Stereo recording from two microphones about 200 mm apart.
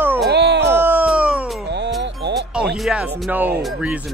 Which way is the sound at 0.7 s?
10° right (ahead or behind).